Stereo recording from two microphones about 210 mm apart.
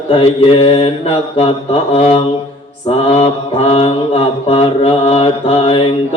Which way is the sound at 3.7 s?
30° left (ahead or behind).